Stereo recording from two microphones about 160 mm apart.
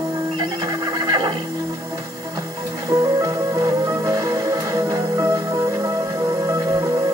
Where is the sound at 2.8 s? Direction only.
20° right (ahead or behind).